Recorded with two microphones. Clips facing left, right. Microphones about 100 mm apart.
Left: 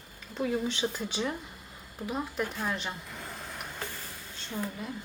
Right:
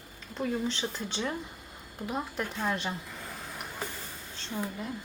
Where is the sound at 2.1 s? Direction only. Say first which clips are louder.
Left 1 dB; centre (ahead or behind).